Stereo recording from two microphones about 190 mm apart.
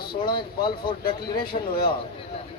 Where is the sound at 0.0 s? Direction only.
55° left (ahead or behind).